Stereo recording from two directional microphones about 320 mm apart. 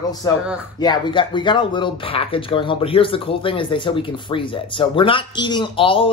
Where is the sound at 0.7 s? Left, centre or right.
Centre.